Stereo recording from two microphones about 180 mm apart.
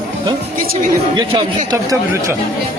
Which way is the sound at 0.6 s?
55° right (ahead or behind).